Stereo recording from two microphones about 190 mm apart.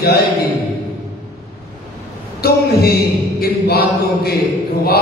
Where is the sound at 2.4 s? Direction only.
55° left (ahead or behind).